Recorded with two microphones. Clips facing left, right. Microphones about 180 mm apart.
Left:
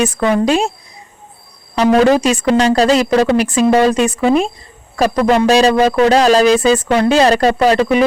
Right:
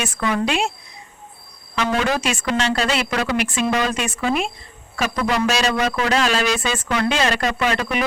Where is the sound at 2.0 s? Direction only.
40° left (ahead or behind).